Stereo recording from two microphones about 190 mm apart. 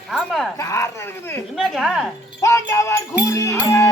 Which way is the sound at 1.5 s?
Centre (ahead or behind).